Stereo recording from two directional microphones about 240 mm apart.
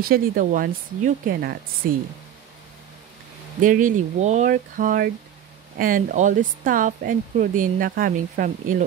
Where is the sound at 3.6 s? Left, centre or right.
Right.